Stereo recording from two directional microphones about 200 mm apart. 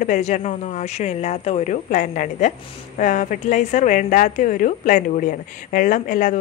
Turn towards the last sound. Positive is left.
turn(degrees=40)  # may be behind; listen again after turning